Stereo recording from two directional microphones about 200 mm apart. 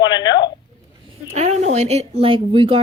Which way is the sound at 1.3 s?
35° right (ahead or behind).